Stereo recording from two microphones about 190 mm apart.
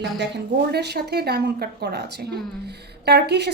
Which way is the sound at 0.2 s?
65° right (ahead or behind).